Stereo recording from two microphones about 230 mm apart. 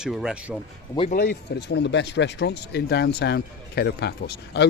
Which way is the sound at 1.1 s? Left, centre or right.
Left.